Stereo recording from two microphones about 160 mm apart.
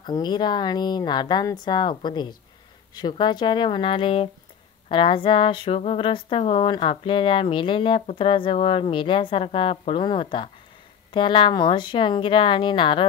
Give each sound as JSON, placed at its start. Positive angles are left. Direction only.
{"t": 0.0, "sound": "a woman's voice", "side_deg": 25}